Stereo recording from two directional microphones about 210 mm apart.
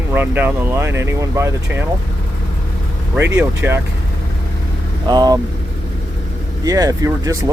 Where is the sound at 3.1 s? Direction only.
10° right (ahead or behind).